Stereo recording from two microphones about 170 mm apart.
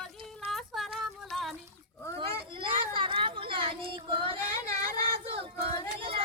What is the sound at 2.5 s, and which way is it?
Child singing, 30° right (ahead or behind).